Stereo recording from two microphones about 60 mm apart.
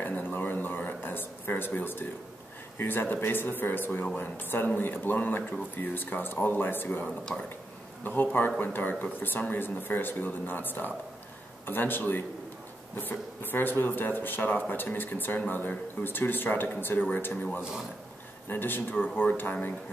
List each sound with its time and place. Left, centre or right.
0.0 s a sound: left
2.8 s speech: left
17.6 s speech: centre
18.5 s speech: left